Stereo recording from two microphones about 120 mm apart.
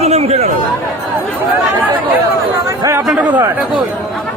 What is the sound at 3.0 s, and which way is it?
Speech, 10° right (ahead or behind).